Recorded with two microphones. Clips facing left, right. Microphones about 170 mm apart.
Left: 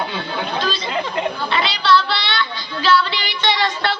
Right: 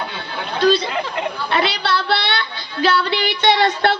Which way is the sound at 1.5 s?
55° right (ahead or behind).